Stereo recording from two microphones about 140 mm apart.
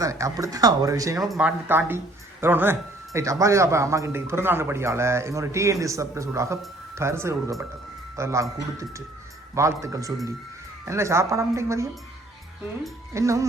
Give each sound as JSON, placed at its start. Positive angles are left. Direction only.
{"t": 0.0, "sound": "speech", "side_deg": -25}
{"t": 1.2, "sound": "speech", "side_deg": -5}
{"t": 13.1, "sound": "speech", "side_deg": -20}